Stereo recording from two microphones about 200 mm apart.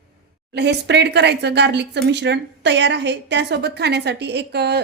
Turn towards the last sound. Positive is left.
turn(degrees=-55)  # may be behind; listen again after turning